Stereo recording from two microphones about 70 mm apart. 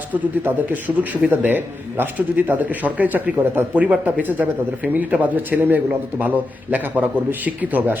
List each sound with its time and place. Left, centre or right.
0.1 s speech: right